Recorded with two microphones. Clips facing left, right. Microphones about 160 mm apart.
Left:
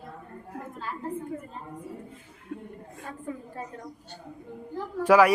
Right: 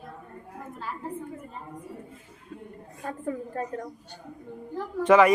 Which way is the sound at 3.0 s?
50° right (ahead or behind).